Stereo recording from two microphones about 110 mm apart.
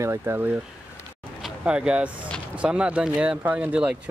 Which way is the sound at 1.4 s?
10° right (ahead or behind).